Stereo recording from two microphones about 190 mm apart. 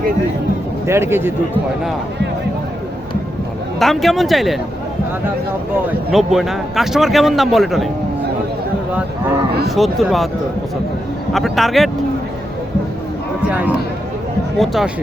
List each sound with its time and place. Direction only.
0.9 s a man's voice: 15° right (ahead or behind)
3.8 s a man's voice: centre (ahead or behind)
6.1 s a man's voice: centre (ahead or behind)
9.6 s a man's voice: centre (ahead or behind)
11.3 s a man's voice: centre (ahead or behind)
13.4 s a man's voice: 10° right (ahead or behind)